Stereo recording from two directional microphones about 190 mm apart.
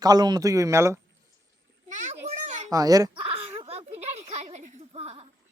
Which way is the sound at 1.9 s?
40° right (ahead or behind).